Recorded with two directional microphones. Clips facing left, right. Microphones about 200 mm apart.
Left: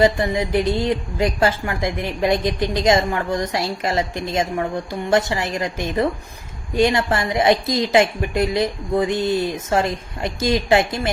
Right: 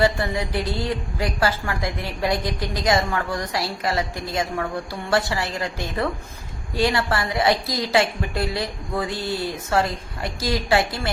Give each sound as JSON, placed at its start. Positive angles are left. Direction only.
{"t": 0.0, "sound": "a woman's voice", "side_deg": 20}